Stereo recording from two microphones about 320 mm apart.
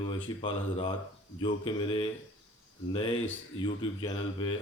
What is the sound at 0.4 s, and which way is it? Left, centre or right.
Speech, centre.